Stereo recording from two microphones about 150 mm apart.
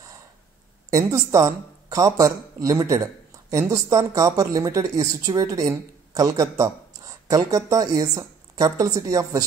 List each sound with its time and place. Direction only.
0.8 s speech: 25° right (ahead or behind)